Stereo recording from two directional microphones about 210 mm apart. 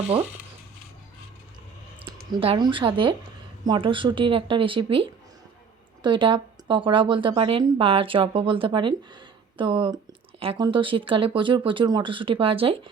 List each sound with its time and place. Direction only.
0.0 s speech: 30° right (ahead or behind)
2.3 s speech: 25° right (ahead or behind)